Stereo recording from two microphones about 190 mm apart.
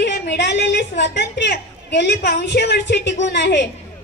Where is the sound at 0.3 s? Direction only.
65° left (ahead or behind).